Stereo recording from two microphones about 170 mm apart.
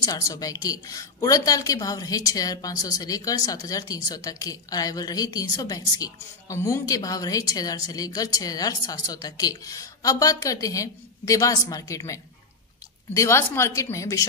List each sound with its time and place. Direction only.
0.0 s a woman's voice: 20° left (ahead or behind)